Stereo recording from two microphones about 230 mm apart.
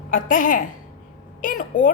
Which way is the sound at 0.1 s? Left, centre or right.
Left.